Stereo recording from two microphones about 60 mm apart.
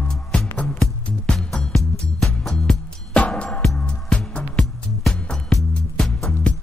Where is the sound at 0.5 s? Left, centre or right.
Left.